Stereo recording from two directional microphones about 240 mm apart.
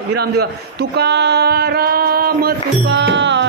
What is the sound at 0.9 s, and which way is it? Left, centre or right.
Music, right.